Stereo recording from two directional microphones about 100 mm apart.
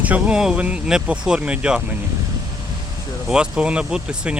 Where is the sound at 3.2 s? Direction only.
10° right (ahead or behind).